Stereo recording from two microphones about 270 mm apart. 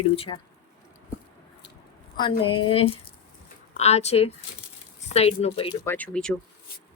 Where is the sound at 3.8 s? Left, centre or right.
Left.